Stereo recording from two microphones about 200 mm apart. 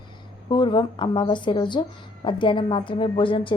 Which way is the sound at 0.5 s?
20° left (ahead or behind).